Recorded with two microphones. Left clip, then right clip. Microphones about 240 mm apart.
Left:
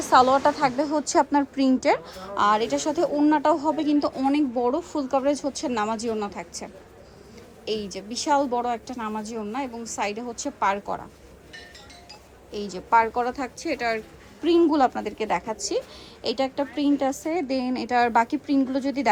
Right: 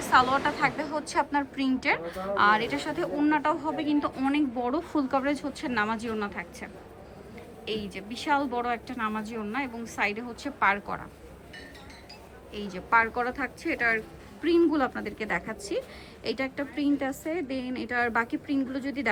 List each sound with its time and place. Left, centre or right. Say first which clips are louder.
0.1 s a woman's voice: left 5 dB; left
12.5 s a woman's voice: left 4 dB; centre